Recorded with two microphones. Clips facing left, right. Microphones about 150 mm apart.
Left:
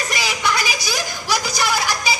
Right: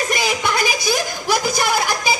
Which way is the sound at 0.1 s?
50° right (ahead or behind).